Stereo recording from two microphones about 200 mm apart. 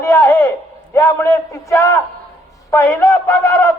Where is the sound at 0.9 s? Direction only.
15° left (ahead or behind).